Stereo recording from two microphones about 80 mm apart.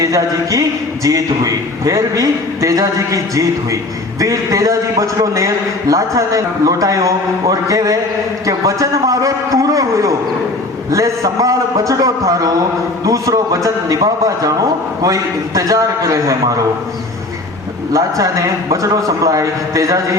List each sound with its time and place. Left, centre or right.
0.0 s a man's voice: right
17.9 s a man's voice: right